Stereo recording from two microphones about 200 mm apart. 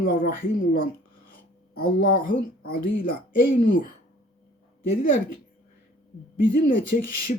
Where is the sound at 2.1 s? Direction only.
45° left (ahead or behind).